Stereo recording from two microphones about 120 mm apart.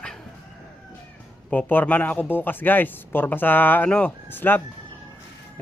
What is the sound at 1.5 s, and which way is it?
Speech, 15° left (ahead or behind).